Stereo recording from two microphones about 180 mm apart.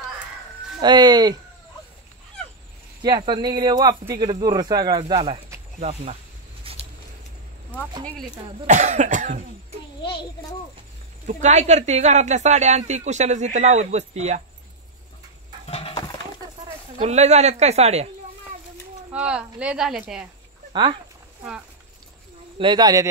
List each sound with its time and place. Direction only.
0.7 s speech: 20° right (ahead or behind)
3.0 s speech: 25° right (ahead or behind)
6.6 s a sound: 30° right (ahead or behind)
7.9 s speech: 25° right (ahead or behind)
8.6 s speech: 40° right (ahead or behind)
11.2 s speech: 40° right (ahead or behind)
15.7 s a sound: 35° left (ahead or behind)
16.6 s speech: 40° right (ahead or behind)
19.0 s speech: 5° right (ahead or behind)
22.6 s speech: 25° right (ahead or behind)